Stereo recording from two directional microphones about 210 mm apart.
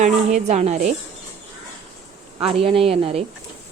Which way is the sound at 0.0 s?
35° right (ahead or behind).